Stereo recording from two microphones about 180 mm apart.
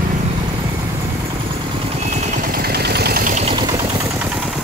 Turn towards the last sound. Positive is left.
turn(degrees=-20)  # may be behind; listen again after turning